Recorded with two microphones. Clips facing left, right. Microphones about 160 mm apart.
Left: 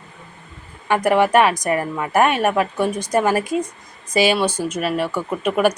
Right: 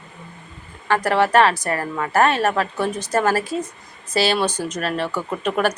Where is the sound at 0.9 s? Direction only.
15° left (ahead or behind).